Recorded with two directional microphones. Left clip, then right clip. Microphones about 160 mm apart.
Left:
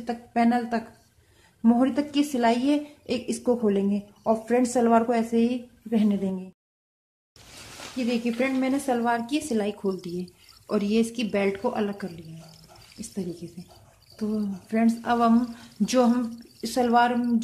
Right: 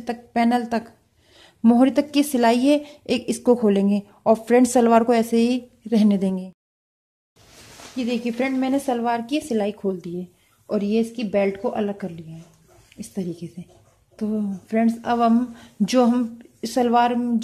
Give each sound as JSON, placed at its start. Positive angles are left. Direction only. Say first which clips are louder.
{"t": 0.0, "sound": "a woman's voice", "louder": "right 3 dB", "side_deg": -40}
{"t": 8.0, "sound": "speech", "louder": "right 2 dB", "side_deg": -35}